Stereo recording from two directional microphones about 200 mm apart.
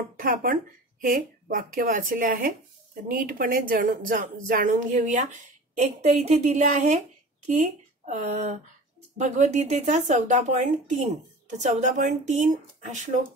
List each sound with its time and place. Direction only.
0.2 s speech: 45° right (ahead or behind)